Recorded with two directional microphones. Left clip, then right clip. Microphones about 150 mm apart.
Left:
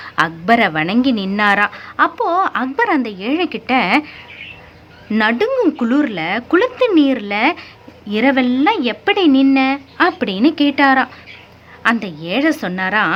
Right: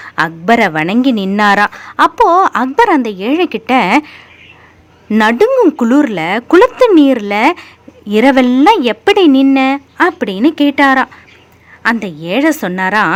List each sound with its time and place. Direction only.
0.0 s speech: 30° right (ahead or behind)